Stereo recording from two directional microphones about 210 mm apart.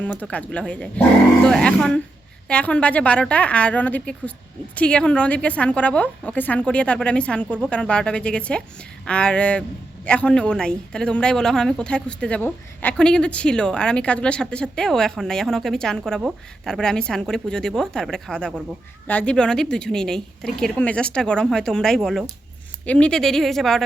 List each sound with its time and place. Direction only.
0.0 s a woman's voice: 5° left (ahead or behind)